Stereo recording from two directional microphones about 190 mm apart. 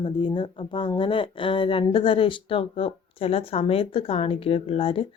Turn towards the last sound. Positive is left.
turn(degrees=30)  # may be behind; listen again after turning